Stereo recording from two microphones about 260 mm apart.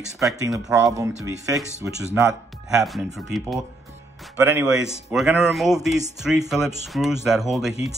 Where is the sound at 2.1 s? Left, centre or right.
Centre.